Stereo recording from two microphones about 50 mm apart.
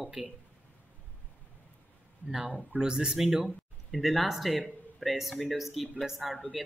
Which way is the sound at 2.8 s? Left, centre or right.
Centre.